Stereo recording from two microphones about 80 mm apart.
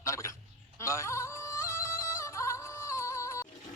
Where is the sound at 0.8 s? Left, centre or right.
Left.